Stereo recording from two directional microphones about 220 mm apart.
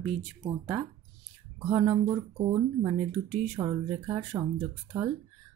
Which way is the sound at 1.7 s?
10° right (ahead or behind).